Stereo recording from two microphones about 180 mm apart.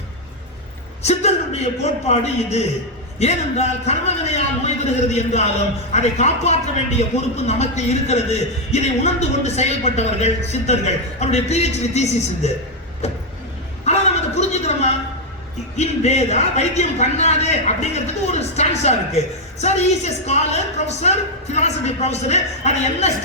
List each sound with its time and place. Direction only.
1.0 s a man's voice: 35° left (ahead or behind)
13.0 s vehicle: 35° left (ahead or behind)
13.8 s a sound: 40° left (ahead or behind)
15.7 s a man's voice: 40° left (ahead or behind)